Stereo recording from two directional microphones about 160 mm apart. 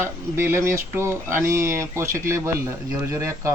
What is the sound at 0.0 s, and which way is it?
Speech, 15° right (ahead or behind).